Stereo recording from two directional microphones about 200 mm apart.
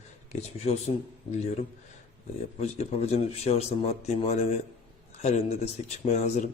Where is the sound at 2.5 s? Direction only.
35° left (ahead or behind).